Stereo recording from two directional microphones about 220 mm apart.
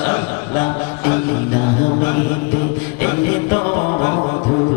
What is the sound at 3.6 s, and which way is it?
Music, 25° left (ahead or behind).